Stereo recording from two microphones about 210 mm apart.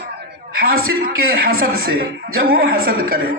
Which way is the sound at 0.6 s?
45° right (ahead or behind).